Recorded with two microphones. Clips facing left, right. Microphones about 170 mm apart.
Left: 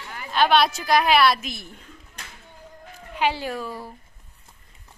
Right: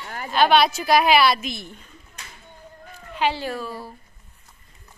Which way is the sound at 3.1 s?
15° left (ahead or behind).